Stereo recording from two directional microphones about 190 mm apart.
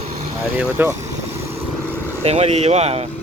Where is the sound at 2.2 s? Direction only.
35° right (ahead or behind).